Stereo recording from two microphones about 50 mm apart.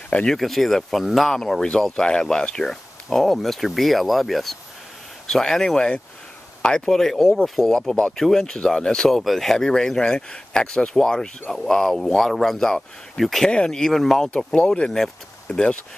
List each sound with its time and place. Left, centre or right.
0.3 s speech: centre
13.5 s speech: centre
14.3 s speech: centre